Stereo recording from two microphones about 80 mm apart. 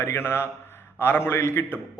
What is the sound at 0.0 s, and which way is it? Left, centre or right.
A man's voice, left.